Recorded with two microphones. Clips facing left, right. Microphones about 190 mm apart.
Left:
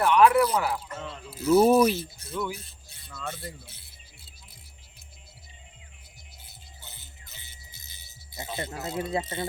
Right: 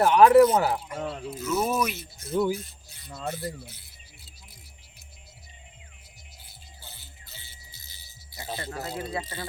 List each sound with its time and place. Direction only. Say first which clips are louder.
0.0 s speech: right 4 dB; 35° right (ahead or behind)
1.4 s speech: left 8 dB; 30° left (ahead or behind)
2.3 s speech: right 7 dB; 30° right (ahead or behind)
2.6 s speech: right 6 dB; 30° left (ahead or behind)
3.1 s speech: right 4 dB; 30° right (ahead or behind)
3.4 s speech: right 6 dB; 30° left (ahead or behind)
6.4 s music: right 1 dB; 20° left (ahead or behind)